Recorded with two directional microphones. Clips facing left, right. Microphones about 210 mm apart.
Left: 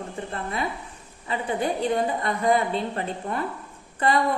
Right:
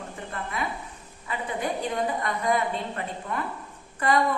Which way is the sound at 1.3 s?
30° left (ahead or behind).